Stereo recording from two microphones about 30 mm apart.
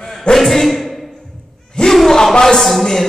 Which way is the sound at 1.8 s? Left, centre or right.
Centre.